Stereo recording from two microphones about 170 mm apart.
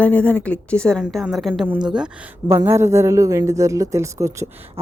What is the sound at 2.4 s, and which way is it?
A woman's voice, 15° right (ahead or behind).